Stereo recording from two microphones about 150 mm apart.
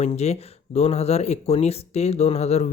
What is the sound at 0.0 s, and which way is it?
Speech, 45° left (ahead or behind).